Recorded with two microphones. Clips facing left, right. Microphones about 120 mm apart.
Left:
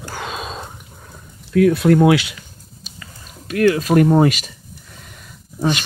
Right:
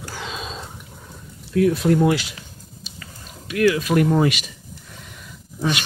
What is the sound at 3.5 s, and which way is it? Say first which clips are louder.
Speech: left 3 dB; 40° left (ahead or behind).